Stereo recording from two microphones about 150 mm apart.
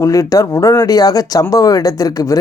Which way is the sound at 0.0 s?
20° left (ahead or behind).